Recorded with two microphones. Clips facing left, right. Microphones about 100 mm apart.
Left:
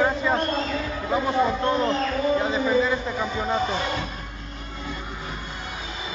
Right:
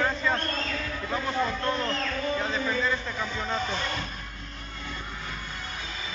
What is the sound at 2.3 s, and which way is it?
Speech, 10° left (ahead or behind).